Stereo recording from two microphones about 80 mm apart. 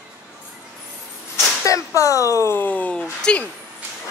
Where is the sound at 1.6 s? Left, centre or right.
Left.